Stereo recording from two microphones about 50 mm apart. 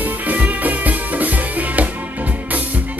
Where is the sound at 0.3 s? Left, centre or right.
Right.